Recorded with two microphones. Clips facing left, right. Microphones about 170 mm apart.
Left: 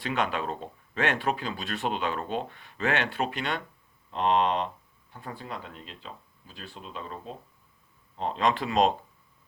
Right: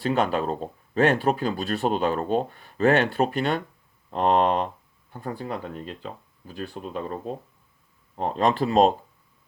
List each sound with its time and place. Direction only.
0.0 s speech: 40° right (ahead or behind)